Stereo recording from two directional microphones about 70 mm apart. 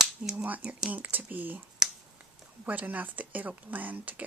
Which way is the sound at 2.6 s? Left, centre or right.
Right.